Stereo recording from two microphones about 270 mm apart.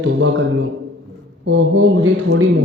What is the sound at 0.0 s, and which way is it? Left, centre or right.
A man's voice, right.